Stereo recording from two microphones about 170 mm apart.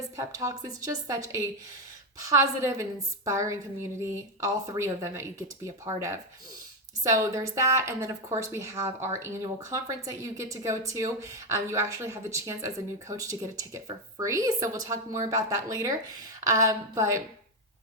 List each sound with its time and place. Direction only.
0.2 s a woman's voice: 20° right (ahead or behind)